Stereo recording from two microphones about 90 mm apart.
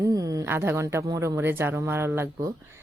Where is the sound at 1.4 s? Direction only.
25° right (ahead or behind).